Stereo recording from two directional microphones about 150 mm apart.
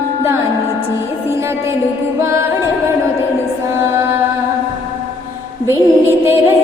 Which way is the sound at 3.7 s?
15° right (ahead or behind).